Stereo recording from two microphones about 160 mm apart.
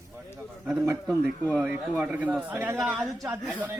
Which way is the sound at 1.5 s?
10° right (ahead or behind).